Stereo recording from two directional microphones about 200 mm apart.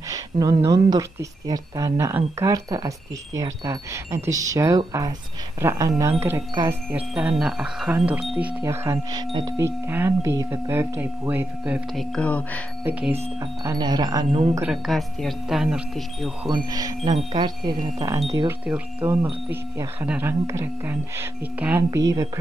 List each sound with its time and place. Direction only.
0.1 s speech: 15° right (ahead or behind); by 12.6 s 5° left (ahead or behind)
13.1 s speech: 20° right (ahead or behind)
14.5 s speech: 5° right (ahead or behind)
16.4 s speech: 20° right (ahead or behind)
18.7 s speech: 10° right (ahead or behind)